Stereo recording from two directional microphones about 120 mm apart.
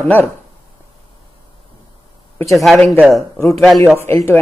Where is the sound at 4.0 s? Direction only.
20° left (ahead or behind).